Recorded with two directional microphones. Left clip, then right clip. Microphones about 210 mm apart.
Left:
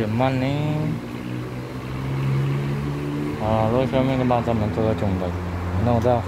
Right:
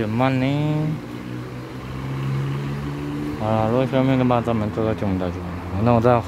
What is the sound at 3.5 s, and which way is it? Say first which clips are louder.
Speech: right 1 dB; 30° right (ahead or behind).